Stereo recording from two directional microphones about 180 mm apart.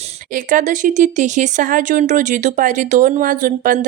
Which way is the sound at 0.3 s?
45° right (ahead or behind).